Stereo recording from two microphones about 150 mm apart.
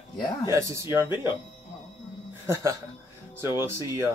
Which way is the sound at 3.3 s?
15° right (ahead or behind).